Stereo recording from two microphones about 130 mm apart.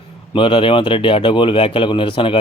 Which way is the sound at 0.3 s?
40° left (ahead or behind).